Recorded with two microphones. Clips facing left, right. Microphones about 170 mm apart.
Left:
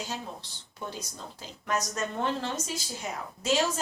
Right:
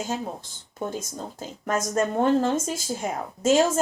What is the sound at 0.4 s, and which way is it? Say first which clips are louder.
Speech: right 8 dB; 50° right (ahead or behind).